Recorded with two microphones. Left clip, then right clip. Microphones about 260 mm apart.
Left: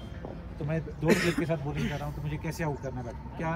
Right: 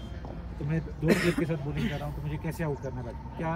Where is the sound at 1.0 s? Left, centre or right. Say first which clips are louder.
Even; right.